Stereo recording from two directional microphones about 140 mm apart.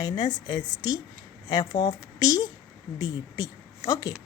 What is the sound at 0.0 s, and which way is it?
Speech, 30° left (ahead or behind).